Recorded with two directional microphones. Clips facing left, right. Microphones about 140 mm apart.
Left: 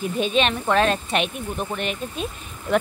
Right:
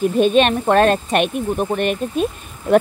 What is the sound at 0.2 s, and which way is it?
Speech, 50° right (ahead or behind).